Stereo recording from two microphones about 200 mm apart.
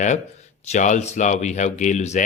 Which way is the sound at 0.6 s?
35° left (ahead or behind).